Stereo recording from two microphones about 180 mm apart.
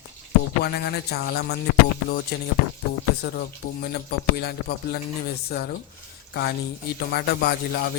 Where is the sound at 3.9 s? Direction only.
60° left (ahead or behind).